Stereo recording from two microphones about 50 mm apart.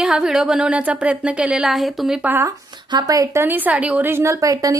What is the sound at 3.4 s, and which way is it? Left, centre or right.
Speech, right.